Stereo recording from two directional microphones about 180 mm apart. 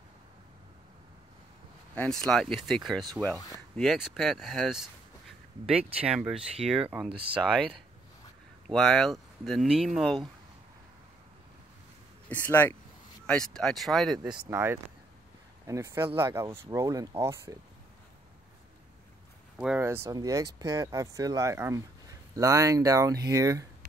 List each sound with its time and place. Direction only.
2.0 s speech: 5° left (ahead or behind)
3.3 s speech: 20° left (ahead or behind)
3.7 s speech: centre (ahead or behind)
7.1 s speech: 30° right (ahead or behind)
7.3 s speech: centre (ahead or behind)
12.3 s speech: 10° left (ahead or behind); by 17.6 s 15° right (ahead or behind)
19.6 s speech: 10° right (ahead or behind)